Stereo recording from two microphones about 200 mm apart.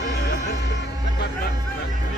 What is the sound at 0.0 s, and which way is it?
Music, 55° left (ahead or behind).